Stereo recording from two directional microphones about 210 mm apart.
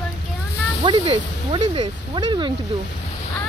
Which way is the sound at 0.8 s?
25° right (ahead or behind).